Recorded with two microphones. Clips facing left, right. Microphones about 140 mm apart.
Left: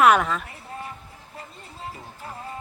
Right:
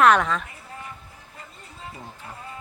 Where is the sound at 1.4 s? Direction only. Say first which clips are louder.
Left 4 dB; 35° left (ahead or behind).